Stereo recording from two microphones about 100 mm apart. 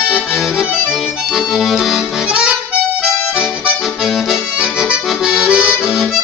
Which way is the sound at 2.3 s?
10° right (ahead or behind).